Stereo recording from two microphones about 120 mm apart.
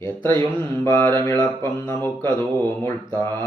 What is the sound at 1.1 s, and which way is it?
Mantra, 20° left (ahead or behind).